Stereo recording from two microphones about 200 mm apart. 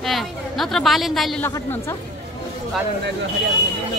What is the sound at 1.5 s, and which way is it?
Speech, 15° left (ahead or behind).